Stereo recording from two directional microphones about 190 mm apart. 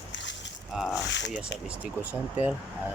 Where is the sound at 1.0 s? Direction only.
70° left (ahead or behind).